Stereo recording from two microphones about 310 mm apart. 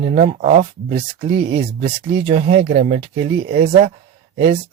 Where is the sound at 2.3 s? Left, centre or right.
Right.